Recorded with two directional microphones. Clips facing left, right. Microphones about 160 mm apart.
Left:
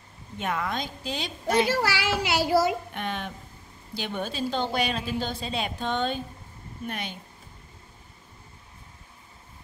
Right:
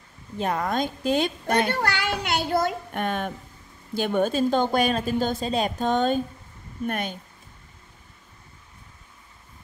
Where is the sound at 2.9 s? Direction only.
50° right (ahead or behind).